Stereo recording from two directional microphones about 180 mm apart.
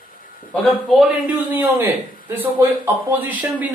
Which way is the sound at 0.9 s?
5° right (ahead or behind).